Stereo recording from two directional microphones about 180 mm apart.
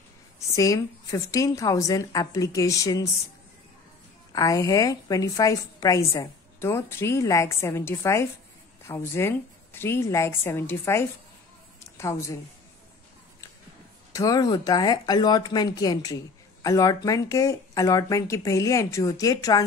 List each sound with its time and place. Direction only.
0.6 s a woman's voice: 20° left (ahead or behind)
4.3 s a woman's voice: 20° left (ahead or behind)
14.1 s a woman's voice: 20° left (ahead or behind)